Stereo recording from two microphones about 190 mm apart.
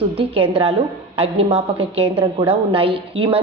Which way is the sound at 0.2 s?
30° right (ahead or behind).